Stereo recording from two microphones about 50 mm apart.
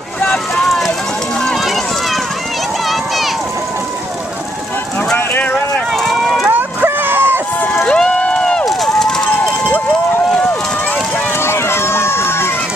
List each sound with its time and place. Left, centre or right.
0.7 s run: centre
5.9 s run: centre
6.5 s a sound: right
7.8 s run: centre
8.1 s crowd: left
8.6 s run: centre
11.3 s run: left